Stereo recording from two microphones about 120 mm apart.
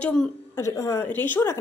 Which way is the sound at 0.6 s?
25° left (ahead or behind).